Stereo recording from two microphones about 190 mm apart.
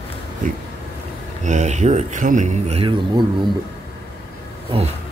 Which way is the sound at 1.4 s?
40° right (ahead or behind).